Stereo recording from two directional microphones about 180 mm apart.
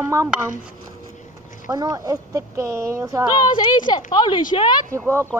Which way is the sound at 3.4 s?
25° left (ahead or behind).